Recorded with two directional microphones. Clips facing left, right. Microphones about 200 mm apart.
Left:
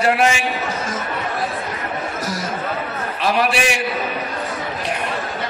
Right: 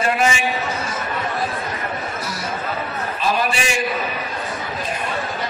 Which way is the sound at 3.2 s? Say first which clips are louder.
Left 3 dB; 75° left (ahead or behind).